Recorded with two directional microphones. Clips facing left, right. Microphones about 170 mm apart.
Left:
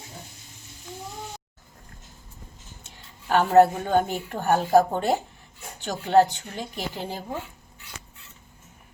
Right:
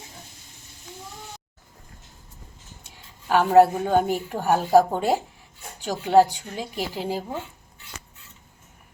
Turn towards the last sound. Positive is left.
turn(degrees=-10)  # may be behind; listen again after turning